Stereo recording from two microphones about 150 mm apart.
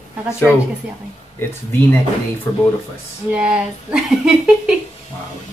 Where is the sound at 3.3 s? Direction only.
10° right (ahead or behind).